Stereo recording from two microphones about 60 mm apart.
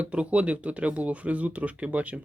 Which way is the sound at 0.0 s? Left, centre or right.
Right.